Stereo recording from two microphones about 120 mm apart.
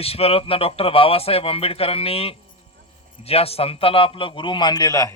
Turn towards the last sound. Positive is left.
turn(degrees=25)  # may be behind; listen again after turning